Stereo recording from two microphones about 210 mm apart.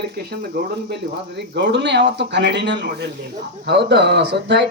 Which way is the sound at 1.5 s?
55° right (ahead or behind).